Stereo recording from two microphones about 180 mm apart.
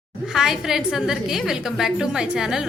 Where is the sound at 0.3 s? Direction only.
Centre (ahead or behind).